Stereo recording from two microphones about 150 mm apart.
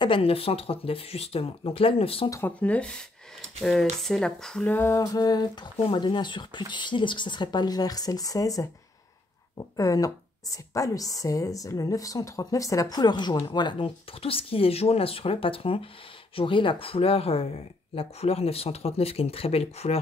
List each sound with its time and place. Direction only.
0.0 s speech: 35° left (ahead or behind)
2.2 s a woman's voice: 20° left (ahead or behind)
2.6 s speech: 10° left (ahead or behind)
4.7 s a woman's voice: 15° left (ahead or behind); by 20.0 s 40° left (ahead or behind)